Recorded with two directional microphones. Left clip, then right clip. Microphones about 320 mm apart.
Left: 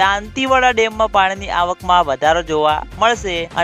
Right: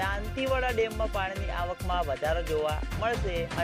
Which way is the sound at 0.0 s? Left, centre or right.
Left.